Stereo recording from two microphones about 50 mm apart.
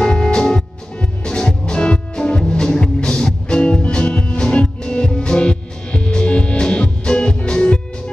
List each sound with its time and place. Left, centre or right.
0.0 s music: centre